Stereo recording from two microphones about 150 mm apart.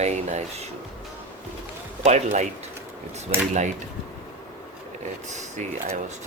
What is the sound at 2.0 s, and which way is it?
Speech, 50° right (ahead or behind).